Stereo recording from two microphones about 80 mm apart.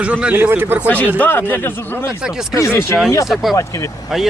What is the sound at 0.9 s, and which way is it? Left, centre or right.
Speech, left.